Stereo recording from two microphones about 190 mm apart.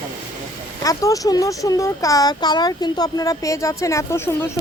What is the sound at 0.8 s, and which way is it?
Speech, 15° left (ahead or behind).